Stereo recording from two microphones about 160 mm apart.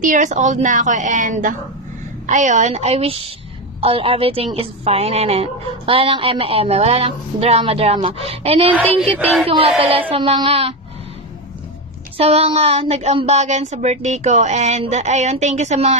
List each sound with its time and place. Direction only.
0.0 s a woman's voice: 50° right (ahead or behind); by 10.7 s 35° right (ahead or behind)
12.2 s speech: 40° right (ahead or behind)